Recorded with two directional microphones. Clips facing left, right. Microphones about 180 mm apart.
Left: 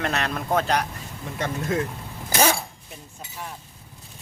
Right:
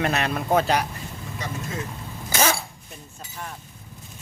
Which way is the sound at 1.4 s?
55° left (ahead or behind).